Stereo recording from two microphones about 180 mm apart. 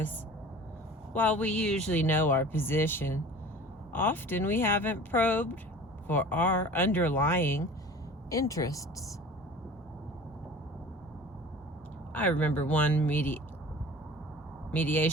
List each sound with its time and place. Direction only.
1.1 s speech: 10° left (ahead or behind)
12.1 s speech: 10° left (ahead or behind)
14.7 s speech: 10° left (ahead or behind)